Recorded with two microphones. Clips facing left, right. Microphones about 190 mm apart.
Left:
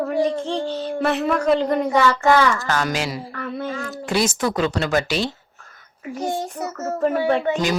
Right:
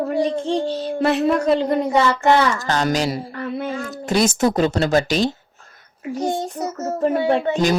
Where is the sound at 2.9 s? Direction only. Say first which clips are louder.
Right 5 dB; 40° right (ahead or behind).